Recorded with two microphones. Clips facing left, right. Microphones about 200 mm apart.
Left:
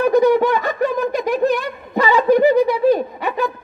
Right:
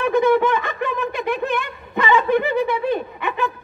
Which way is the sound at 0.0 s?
40° left (ahead or behind).